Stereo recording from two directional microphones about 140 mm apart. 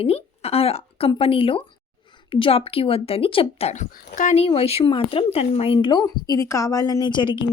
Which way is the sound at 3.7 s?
60° left (ahead or behind).